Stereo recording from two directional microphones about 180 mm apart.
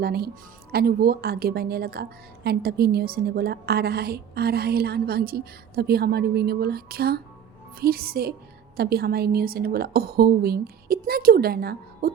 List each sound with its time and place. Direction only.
0.0 s a woman's voice: 60° right (ahead or behind)